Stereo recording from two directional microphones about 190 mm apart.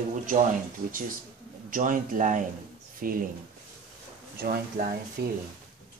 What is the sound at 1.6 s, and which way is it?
Speech, 45° right (ahead or behind).